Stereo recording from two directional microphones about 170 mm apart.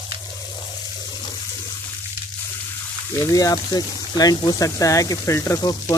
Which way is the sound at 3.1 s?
20° left (ahead or behind).